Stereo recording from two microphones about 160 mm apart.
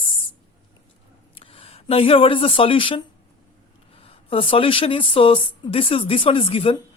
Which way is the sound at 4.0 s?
35° left (ahead or behind).